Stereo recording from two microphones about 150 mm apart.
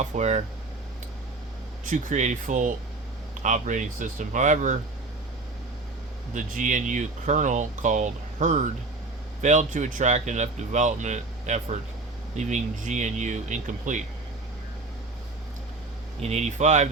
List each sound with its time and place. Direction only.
0.0 s speech: 50° right (ahead or behind)
1.8 s speech: 60° right (ahead or behind)
6.3 s speech: 60° right (ahead or behind)
16.2 s speech: 50° right (ahead or behind)